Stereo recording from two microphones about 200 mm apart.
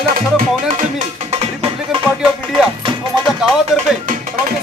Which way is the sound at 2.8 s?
25° right (ahead or behind).